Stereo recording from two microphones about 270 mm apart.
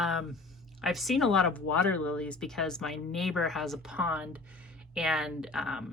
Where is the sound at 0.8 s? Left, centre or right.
Centre.